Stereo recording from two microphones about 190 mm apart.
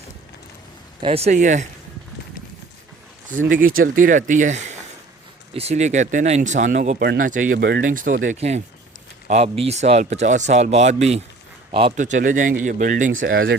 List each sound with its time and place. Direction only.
1.0 s speech: 35° right (ahead or behind)
3.2 s speech: 45° right (ahead or behind)
7.0 s a man's voice: 50° right (ahead or behind); by 11.9 s 30° right (ahead or behind)
11.9 s speech: 40° right (ahead or behind)